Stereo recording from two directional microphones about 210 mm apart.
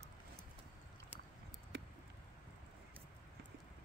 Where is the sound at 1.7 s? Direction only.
50° right (ahead or behind).